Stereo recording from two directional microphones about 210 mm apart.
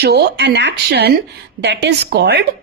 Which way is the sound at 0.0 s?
50° right (ahead or behind).